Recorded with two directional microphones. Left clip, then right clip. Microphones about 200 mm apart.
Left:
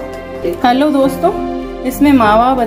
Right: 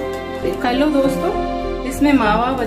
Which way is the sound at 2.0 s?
30° left (ahead or behind).